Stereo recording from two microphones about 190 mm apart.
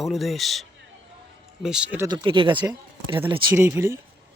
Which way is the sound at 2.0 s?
25° right (ahead or behind).